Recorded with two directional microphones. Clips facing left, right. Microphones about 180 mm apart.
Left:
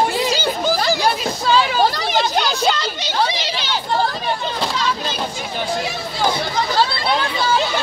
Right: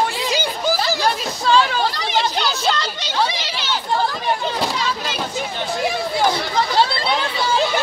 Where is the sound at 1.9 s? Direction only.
45° left (ahead or behind).